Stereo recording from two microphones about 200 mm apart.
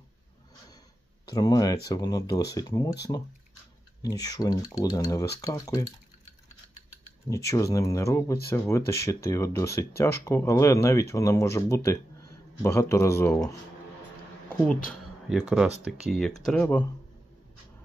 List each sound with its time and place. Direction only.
1.3 s speech: 20° left (ahead or behind)
4.0 s speech: 20° left (ahead or behind)
7.2 s speech: 15° left (ahead or behind)
14.7 s speech: centre (ahead or behind)